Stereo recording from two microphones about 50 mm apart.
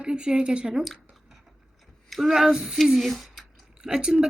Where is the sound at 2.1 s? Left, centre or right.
Centre.